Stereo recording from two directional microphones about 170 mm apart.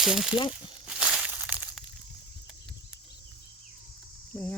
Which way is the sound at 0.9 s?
5° right (ahead or behind).